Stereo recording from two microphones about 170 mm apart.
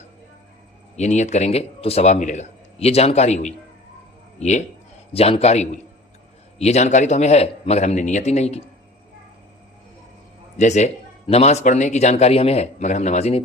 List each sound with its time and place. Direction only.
0.9 s a man's voice: 45° left (ahead or behind)
10.6 s speech: 45° left (ahead or behind)